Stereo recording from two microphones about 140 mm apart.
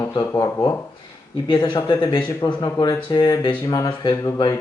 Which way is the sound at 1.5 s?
35° left (ahead or behind).